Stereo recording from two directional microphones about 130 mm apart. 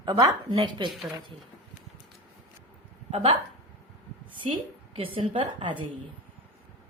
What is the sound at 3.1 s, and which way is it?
Speech, 50° right (ahead or behind).